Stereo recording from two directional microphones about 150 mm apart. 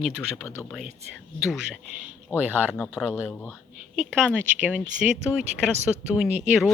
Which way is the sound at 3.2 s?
10° left (ahead or behind).